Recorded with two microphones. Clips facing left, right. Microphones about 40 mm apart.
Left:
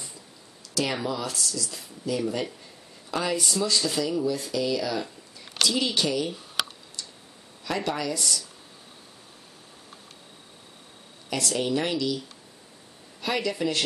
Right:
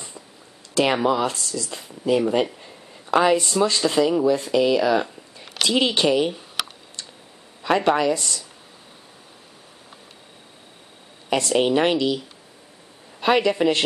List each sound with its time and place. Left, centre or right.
0.7 s speech: right
7.6 s speech: right
11.2 s speech: right
13.2 s speech: right